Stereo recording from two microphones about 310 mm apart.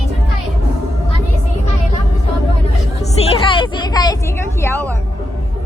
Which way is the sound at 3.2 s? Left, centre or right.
Centre.